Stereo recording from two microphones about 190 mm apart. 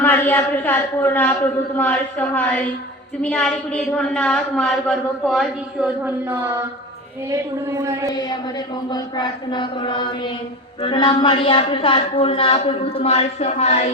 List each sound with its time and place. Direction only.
0.0 s a man's voice: 10° left (ahead or behind); by 7.9 s 15° right (ahead or behind)
8.9 s a man's voice: 20° left (ahead or behind)